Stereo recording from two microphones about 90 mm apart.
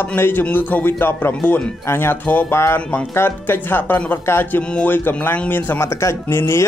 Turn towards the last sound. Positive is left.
turn(degrees=25)  # may be behind; listen again after turning